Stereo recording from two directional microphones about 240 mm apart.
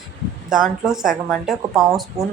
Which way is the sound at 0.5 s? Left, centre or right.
Centre.